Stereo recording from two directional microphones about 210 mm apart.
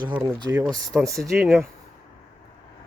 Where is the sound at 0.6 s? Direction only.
Centre (ahead or behind).